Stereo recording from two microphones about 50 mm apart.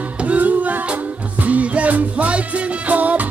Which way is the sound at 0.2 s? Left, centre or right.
Right.